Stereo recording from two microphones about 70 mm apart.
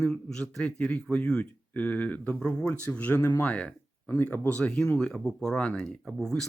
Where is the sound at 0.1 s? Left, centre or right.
Centre; by 3.3 s left.